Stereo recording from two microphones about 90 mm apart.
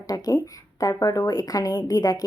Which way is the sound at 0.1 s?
45° left (ahead or behind).